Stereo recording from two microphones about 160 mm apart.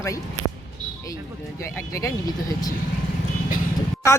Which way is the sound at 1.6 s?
20° left (ahead or behind).